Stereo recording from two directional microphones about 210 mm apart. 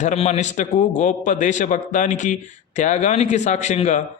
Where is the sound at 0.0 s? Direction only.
35° left (ahead or behind).